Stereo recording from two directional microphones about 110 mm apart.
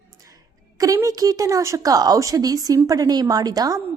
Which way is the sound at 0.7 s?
30° right (ahead or behind).